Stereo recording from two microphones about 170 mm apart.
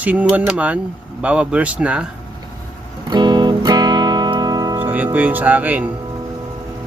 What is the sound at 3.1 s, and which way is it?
Music, 25° right (ahead or behind).